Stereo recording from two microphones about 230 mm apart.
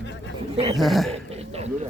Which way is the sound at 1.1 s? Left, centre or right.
Right.